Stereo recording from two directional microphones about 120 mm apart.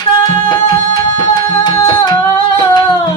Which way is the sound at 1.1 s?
35° left (ahead or behind).